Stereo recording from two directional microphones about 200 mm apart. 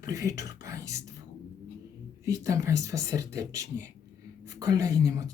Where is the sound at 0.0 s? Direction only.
15° right (ahead or behind).